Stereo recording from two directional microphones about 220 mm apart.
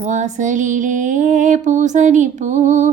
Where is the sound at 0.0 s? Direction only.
35° right (ahead or behind).